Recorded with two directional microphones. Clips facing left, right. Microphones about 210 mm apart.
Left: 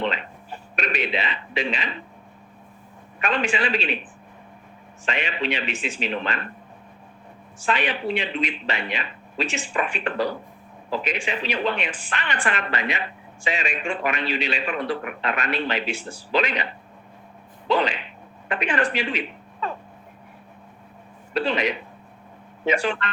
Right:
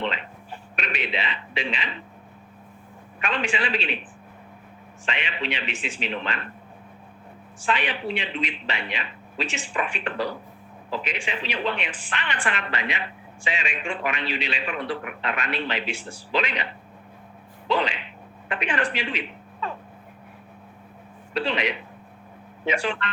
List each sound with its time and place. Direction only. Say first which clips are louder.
0.8 s a woman's voice: left 4 dB; 40° left (ahead or behind)
3.2 s speech: left 3 dB; 40° left (ahead or behind)
5.0 s speech: left 4 dB; 40° left (ahead or behind)
7.6 s a woman's voice: left 2 dB; 40° left (ahead or behind)
17.7 s speech: left 3 dB; 40° left (ahead or behind)
19.6 s a sound: left 2 dB; 45° left (ahead or behind)
21.3 s a woman's voice: left 3 dB; 45° left (ahead or behind)